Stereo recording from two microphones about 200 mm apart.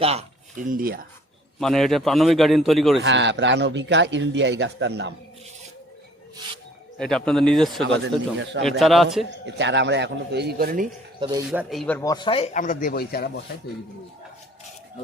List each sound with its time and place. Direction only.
0.0 s speech: 30° right (ahead or behind); by 1.0 s 45° right (ahead or behind)
1.5 s a man's voice: centre (ahead or behind)
3.0 s a man's voice: 65° right (ahead or behind)
7.0 s a man's voice: 5° left (ahead or behind)
7.9 s a man's voice: 65° right (ahead or behind)
8.8 s a man's voice: centre (ahead or behind)
9.5 s a man's voice: 60° right (ahead or behind)
11.2 s speech: 25° right (ahead or behind)
11.5 s speech: centre (ahead or behind); by 12.5 s 25° left (ahead or behind)
12.5 s speech: 40° left (ahead or behind)